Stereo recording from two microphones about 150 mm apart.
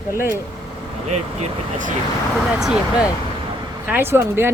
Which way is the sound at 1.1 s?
45° right (ahead or behind).